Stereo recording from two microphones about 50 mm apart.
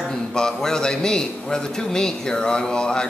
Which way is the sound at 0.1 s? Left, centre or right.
Centre.